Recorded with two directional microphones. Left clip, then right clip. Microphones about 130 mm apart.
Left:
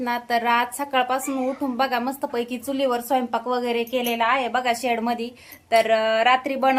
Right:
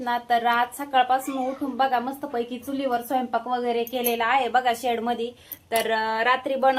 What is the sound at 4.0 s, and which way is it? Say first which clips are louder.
A woman's voice: left 1 dB; 20° left (ahead or behind).